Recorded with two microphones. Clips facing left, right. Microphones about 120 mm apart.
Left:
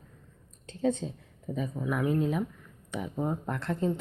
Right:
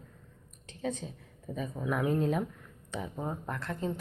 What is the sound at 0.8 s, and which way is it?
Speech, 30° left (ahead or behind).